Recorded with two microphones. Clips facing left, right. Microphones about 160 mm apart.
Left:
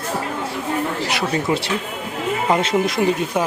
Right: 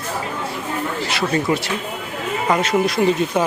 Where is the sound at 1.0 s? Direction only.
15° left (ahead or behind).